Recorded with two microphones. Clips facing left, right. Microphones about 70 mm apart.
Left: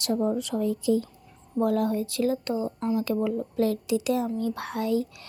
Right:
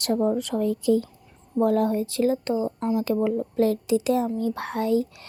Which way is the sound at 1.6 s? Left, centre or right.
Right.